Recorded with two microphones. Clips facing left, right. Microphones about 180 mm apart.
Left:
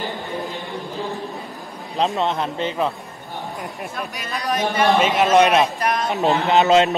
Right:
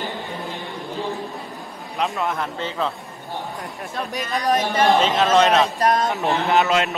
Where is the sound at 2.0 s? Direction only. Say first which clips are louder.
Left 3 dB; 20° left (ahead or behind).